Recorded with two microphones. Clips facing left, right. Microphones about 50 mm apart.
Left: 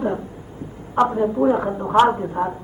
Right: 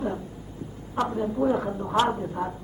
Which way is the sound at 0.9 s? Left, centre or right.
Left.